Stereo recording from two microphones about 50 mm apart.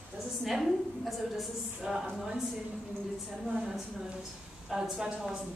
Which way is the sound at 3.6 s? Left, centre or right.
Centre.